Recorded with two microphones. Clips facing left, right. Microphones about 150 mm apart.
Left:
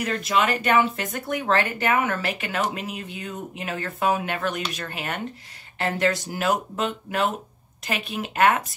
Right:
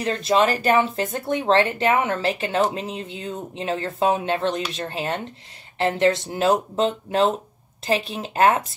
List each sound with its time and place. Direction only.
0.0 s speech: 30° right (ahead or behind)